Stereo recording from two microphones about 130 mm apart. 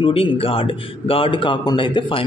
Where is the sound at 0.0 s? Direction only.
45° left (ahead or behind).